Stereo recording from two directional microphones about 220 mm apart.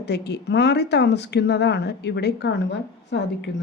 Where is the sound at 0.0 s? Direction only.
50° left (ahead or behind).